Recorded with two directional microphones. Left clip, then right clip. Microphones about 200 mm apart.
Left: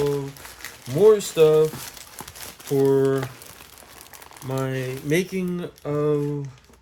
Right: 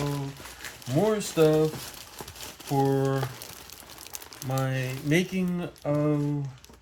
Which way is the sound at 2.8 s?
70° left (ahead or behind).